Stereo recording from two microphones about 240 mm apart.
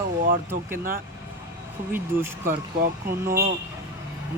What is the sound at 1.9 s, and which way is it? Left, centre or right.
Speech, centre.